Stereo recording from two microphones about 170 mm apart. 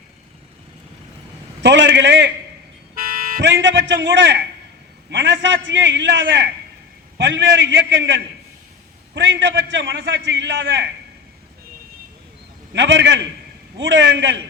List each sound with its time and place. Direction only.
1.6 s a man's voice: 90° right
2.9 s vehicle: 55° right (ahead or behind)
3.4 s a man's voice: 90° right
12.7 s a man's voice: 90° right